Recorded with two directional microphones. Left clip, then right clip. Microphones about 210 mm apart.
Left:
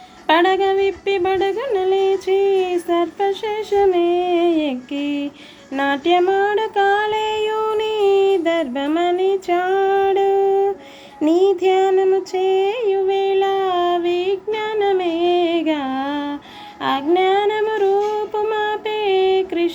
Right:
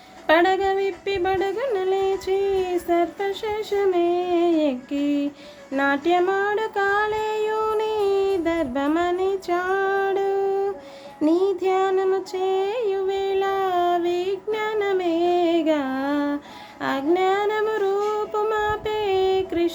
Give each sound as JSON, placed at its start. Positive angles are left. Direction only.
{"t": 0.3, "sound": "a sound", "side_deg": -5}
{"t": 5.7, "sound": "music", "side_deg": -5}
{"t": 11.3, "sound": "music", "side_deg": -30}
{"t": 11.5, "sound": "a sound", "side_deg": 5}
{"t": 12.9, "sound": "female singing", "side_deg": -5}
{"t": 16.8, "sound": "humming", "side_deg": -5}